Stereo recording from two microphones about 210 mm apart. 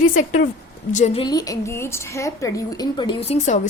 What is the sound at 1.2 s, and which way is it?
A woman's voice, 20° left (ahead or behind).